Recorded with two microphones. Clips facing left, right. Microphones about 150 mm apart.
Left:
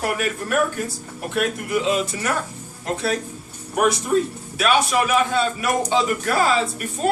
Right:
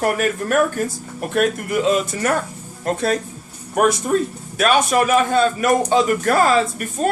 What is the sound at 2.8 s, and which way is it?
Speech, 45° right (ahead or behind).